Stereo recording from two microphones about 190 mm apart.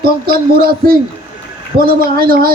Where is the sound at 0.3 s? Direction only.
50° right (ahead or behind).